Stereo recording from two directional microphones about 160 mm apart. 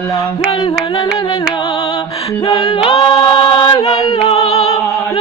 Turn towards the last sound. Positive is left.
turn(degrees=40)  # may be behind; listen again after turning